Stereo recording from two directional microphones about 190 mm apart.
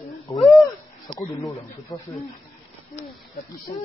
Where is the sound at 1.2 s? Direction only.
20° left (ahead or behind).